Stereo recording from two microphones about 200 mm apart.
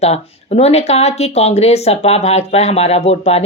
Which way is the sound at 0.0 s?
30° left (ahead or behind).